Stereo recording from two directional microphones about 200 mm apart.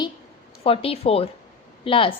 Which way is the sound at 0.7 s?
30° left (ahead or behind).